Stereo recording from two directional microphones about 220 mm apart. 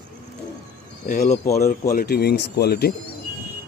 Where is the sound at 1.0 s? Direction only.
40° left (ahead or behind).